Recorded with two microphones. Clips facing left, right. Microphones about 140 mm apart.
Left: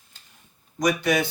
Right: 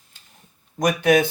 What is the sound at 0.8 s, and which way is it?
Speech, 55° right (ahead or behind).